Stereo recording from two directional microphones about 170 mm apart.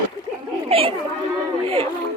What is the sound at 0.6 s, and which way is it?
Chatter, 35° right (ahead or behind).